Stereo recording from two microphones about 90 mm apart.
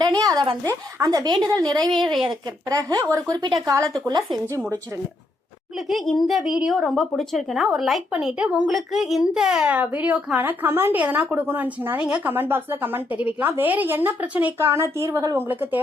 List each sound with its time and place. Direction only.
0.0 s a sound: 45° right (ahead or behind)
0.9 s speech: 45° right (ahead or behind)
5.9 s a woman's voice: centre (ahead or behind); by 11.9 s 25° right (ahead or behind)
11.9 s a woman's voice: 10° right (ahead or behind); by 15.4 s 30° right (ahead or behind)
15.4 s a woman's voice: 20° right (ahead or behind)